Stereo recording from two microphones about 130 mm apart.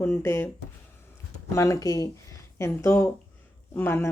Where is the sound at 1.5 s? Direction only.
25° left (ahead or behind).